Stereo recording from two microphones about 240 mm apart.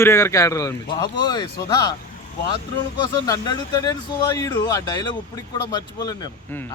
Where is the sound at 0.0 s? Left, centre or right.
Centre.